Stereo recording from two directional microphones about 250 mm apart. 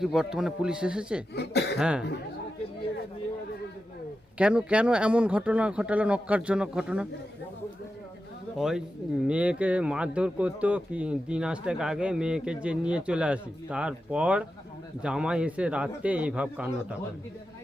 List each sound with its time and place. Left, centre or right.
0.0 s speech: centre
1.4 s speech: left
1.8 s speech: centre
4.4 s speech: centre
8.5 s speech: centre